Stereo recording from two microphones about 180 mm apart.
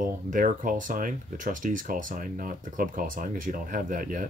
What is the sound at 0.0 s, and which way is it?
Speech, 45° right (ahead or behind).